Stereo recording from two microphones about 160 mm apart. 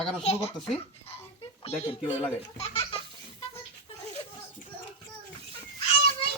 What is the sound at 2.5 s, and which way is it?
Baby laughter, 40° left (ahead or behind).